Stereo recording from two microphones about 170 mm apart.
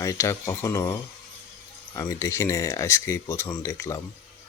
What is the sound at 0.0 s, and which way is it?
Speech, 20° left (ahead or behind).